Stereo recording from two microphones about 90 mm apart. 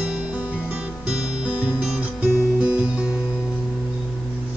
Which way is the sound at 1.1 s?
10° right (ahead or behind).